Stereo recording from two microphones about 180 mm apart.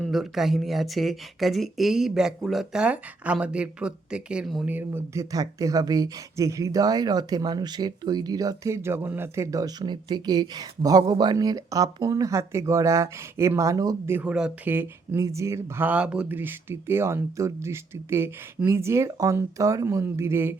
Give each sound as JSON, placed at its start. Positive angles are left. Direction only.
{"t": 0.0, "sound": "speech", "side_deg": 0}